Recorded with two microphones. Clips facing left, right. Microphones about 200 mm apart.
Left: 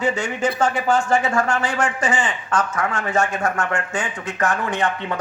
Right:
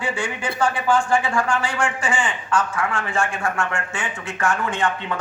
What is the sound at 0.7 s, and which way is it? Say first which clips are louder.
A man's voice: left 1 dB; 40° left (ahead or behind).